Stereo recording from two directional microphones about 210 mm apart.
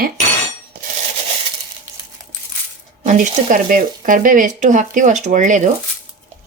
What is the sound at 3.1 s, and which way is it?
Speech, 40° right (ahead or behind).